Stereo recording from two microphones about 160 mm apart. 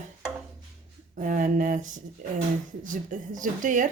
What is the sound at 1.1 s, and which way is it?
Speech, 55° right (ahead or behind).